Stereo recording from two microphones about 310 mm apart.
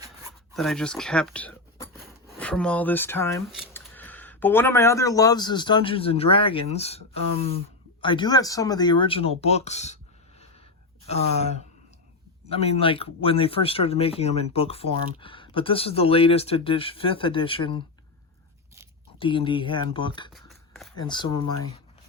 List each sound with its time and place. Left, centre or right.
0.5 s speech: centre
2.0 s a sound: centre
2.4 s speech: centre; by 10.4 s left
12.5 s speech: centre
19.2 s speech: centre
20.3 s shuffling cards: centre
20.9 s speech: centre